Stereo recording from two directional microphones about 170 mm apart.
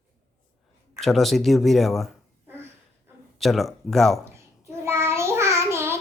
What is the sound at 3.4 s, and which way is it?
Speech, centre (ahead or behind).